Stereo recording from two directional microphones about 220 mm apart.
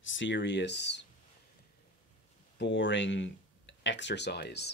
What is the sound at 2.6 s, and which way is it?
Speech, 55° left (ahead or behind).